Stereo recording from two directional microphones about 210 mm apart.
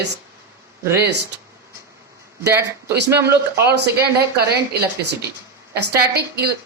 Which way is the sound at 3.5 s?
50° right (ahead or behind).